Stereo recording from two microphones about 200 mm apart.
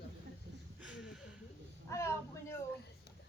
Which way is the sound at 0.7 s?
5° right (ahead or behind).